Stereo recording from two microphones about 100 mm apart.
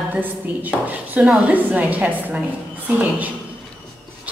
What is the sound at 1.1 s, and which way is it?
A woman's voice, 10° right (ahead or behind).